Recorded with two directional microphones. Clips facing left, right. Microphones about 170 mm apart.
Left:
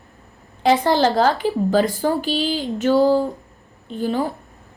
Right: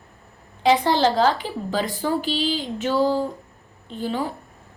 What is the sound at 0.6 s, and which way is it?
A woman's voice, 50° left (ahead or behind).